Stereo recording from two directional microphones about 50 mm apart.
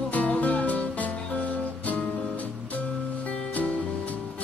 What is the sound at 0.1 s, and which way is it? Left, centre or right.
Music, left.